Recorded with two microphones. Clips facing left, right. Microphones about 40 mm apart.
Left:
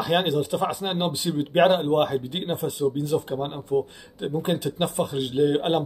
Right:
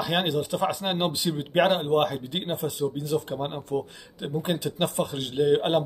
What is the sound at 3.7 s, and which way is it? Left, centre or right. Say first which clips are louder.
Speech: left 6 dB; right.